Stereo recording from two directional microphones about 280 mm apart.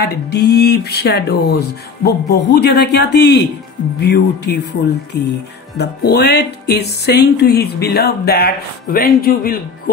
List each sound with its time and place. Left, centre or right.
0.1 s music: left